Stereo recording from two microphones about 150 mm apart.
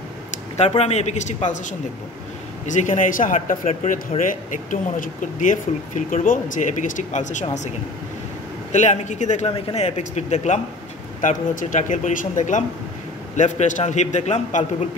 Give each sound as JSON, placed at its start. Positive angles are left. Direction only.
{"t": 0.3, "sound": "a man's voice", "side_deg": 45}
{"t": 8.7, "sound": "a man's voice", "side_deg": 50}